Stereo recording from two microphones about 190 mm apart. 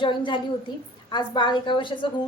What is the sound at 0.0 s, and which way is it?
A woman's voice, 25° left (ahead or behind).